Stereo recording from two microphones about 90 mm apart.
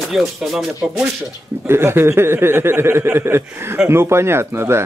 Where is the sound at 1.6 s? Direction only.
25° right (ahead or behind).